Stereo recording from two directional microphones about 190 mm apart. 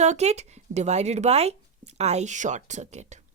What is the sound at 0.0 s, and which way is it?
Speech, 35° right (ahead or behind).